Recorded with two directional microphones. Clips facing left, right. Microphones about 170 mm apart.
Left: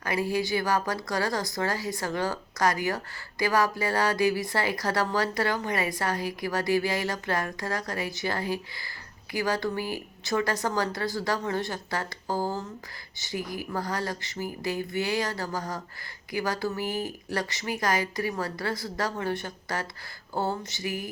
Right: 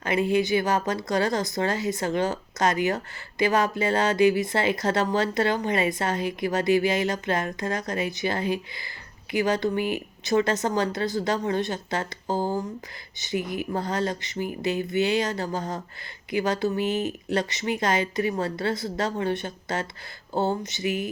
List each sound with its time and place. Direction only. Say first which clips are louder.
0.0 s speech: right 5 dB; 20° right (ahead or behind)